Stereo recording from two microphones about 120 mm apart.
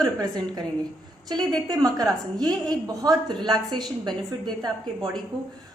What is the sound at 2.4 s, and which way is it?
A woman's voice, 35° right (ahead or behind).